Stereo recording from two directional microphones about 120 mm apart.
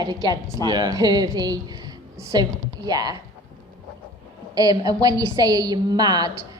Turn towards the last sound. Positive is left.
turn(degrees=-35)  # may be behind; listen again after turning